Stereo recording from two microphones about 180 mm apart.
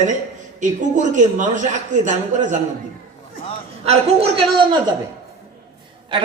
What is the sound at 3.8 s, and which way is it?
Speech, 35° right (ahead or behind).